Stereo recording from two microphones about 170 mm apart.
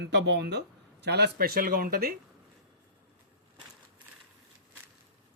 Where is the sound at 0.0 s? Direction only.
90° right.